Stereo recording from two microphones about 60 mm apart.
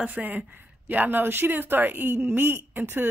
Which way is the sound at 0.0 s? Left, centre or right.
Right.